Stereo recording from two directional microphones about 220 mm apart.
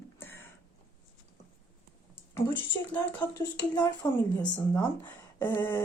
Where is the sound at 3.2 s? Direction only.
20° left (ahead or behind).